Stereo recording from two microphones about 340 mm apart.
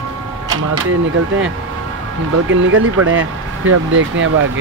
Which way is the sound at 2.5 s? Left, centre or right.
Right.